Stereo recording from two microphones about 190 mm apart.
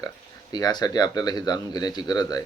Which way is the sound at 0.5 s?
20° left (ahead or behind).